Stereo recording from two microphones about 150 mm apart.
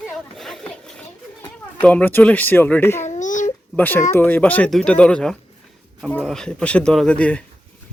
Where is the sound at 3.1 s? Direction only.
55° left (ahead or behind).